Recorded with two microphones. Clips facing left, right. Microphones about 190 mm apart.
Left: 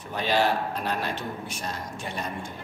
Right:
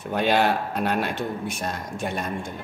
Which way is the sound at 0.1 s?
55° right (ahead or behind).